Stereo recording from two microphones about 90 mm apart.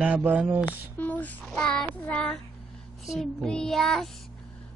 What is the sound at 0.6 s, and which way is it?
Child singing, 20° left (ahead or behind).